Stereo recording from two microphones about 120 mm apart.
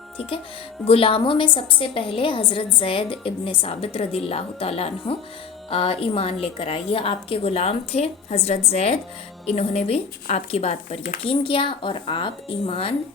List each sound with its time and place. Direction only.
0.9 s a woman's voice: 50° left (ahead or behind)